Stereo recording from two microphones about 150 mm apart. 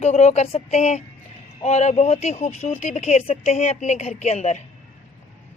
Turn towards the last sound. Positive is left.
turn(degrees=50)  # may be behind; listen again after turning